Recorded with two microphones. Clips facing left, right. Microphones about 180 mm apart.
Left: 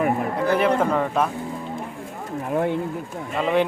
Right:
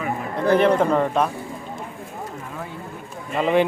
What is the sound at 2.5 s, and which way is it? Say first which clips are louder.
Speech: left 17 dB; 70° left (ahead or behind).